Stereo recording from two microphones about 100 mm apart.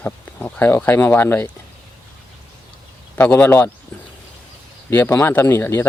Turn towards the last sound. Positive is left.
turn(degrees=25)  # may be behind; listen again after turning